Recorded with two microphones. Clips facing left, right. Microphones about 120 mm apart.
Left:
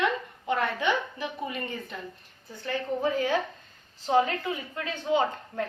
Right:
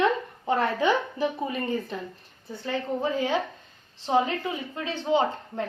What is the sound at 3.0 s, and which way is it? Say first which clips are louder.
A woman's voice: left 1 dB; 20° right (ahead or behind).